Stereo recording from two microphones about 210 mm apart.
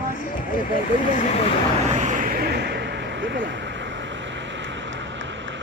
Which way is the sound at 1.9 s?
35° right (ahead or behind).